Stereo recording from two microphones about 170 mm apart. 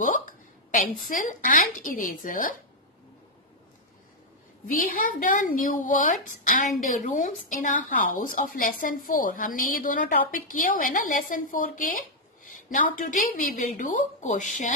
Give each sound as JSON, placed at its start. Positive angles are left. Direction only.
{"t": 0.7, "sound": "speech", "side_deg": 50}
{"t": 4.6, "sound": "speech", "side_deg": 55}